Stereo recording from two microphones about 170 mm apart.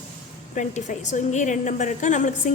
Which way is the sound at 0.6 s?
45° left (ahead or behind).